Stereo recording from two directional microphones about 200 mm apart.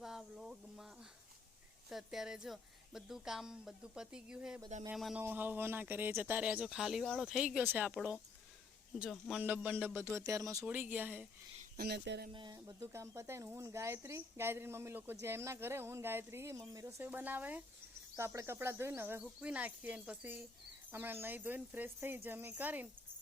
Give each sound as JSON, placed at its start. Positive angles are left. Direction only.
{"t": 0.0, "sound": "a sound", "side_deg": 0}
{"t": 1.9, "sound": "speech", "side_deg": 0}
{"t": 11.8, "sound": "speech", "side_deg": -55}
{"t": 12.3, "sound": "speech", "side_deg": -20}